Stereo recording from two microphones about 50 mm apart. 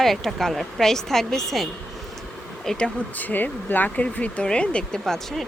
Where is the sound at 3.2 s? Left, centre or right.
Left.